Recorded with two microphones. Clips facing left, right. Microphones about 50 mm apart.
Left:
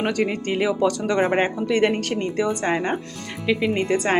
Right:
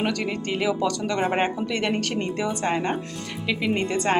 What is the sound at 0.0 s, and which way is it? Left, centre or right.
A woman's voice, centre.